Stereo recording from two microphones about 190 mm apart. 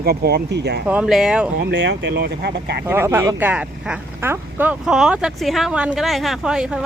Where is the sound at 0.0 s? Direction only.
55° right (ahead or behind).